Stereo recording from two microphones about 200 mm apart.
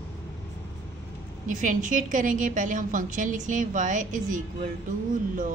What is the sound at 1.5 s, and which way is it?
A woman's voice, 40° right (ahead or behind).